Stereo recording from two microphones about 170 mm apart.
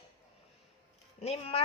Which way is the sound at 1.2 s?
35° left (ahead or behind).